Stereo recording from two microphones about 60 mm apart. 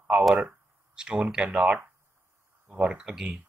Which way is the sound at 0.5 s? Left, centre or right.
Centre.